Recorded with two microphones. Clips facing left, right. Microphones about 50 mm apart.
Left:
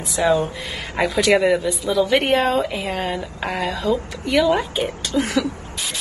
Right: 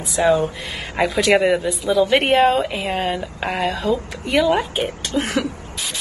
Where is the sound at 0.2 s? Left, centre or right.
Right.